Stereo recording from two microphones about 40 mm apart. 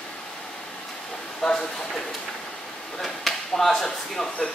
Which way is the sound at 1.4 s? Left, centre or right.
Left.